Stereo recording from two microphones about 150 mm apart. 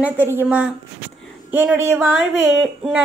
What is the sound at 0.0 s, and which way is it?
Child singing, 15° right (ahead or behind).